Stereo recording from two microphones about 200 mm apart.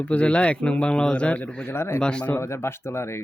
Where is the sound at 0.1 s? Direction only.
5° left (ahead or behind).